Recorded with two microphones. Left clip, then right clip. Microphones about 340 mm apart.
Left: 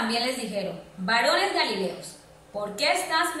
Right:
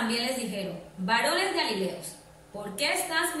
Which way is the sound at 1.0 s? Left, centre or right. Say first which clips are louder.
Left 3 dB; centre.